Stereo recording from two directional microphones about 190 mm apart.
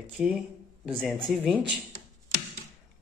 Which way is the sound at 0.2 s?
Centre (ahead or behind).